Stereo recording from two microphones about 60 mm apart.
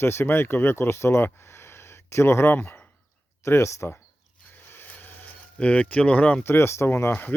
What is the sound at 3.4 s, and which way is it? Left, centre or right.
Speech, left.